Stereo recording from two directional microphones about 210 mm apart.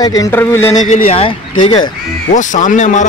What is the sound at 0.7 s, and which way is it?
Music, 35° left (ahead or behind).